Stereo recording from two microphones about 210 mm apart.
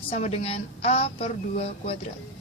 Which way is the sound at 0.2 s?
30° left (ahead or behind).